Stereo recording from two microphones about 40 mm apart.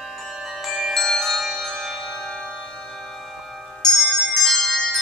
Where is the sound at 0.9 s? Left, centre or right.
Centre.